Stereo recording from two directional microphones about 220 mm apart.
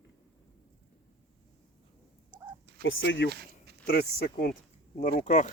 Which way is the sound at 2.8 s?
55° left (ahead or behind).